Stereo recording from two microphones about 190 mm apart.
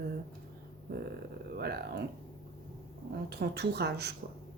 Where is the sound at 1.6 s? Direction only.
60° right (ahead or behind).